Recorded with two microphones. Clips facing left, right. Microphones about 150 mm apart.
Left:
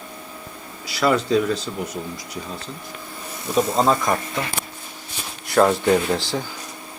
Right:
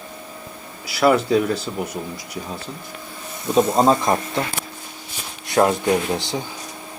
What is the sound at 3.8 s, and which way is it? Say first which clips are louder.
Speech: right 2 dB; 25° right (ahead or behind).